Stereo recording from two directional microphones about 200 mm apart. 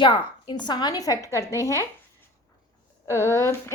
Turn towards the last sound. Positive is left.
turn(degrees=15)  # may be behind; listen again after turning